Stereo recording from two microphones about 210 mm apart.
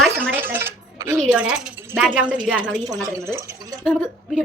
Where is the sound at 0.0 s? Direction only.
10° right (ahead or behind).